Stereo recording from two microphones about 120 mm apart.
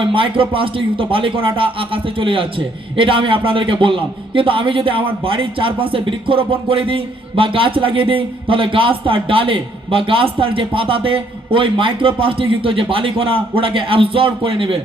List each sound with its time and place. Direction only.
0.0 s a man's voice: 45° right (ahead or behind)